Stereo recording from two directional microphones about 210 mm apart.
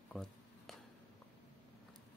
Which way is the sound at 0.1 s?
Centre (ahead or behind).